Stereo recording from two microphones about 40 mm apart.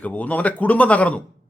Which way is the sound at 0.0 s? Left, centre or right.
Left.